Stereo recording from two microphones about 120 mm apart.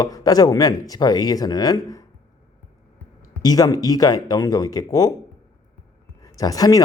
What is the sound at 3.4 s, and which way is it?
Speech, 30° left (ahead or behind).